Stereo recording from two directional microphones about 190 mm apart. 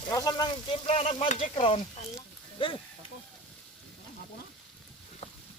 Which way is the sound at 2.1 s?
25° left (ahead or behind).